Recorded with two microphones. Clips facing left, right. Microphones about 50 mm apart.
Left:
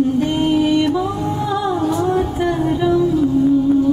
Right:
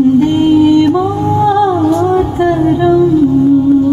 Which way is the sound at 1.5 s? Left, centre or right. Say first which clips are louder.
Right 10 dB; centre.